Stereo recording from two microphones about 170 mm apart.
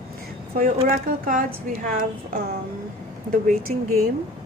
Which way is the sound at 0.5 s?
50° right (ahead or behind).